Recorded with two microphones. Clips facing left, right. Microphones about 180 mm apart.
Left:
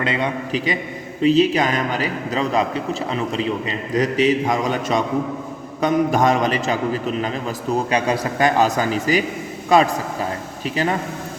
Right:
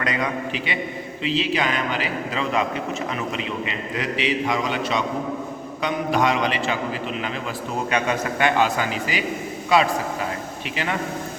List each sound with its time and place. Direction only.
0.0 s a man's voice: 30° left (ahead or behind); by 9.9 s 45° left (ahead or behind)